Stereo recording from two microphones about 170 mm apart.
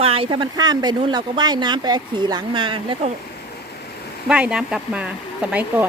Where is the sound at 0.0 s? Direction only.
35° right (ahead or behind).